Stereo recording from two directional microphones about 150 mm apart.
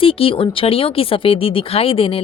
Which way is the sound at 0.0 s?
35° left (ahead or behind).